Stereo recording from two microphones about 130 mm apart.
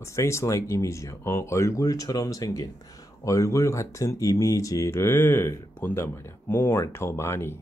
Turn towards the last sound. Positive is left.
turn(degrees=20)  # may be behind; listen again after turning